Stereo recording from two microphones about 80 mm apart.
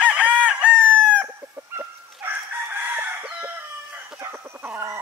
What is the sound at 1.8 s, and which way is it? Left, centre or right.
Chicken, right.